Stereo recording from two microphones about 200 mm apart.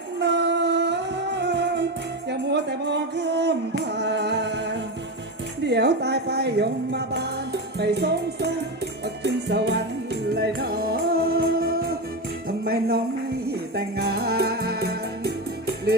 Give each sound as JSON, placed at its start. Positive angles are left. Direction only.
{"t": 0.2, "sound": "music", "side_deg": -60}
{"t": 5.6, "sound": "speech", "side_deg": -55}
{"t": 9.2, "sound": "music", "side_deg": -60}